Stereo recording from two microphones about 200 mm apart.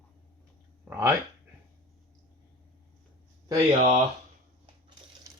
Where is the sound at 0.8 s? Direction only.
10° right (ahead or behind).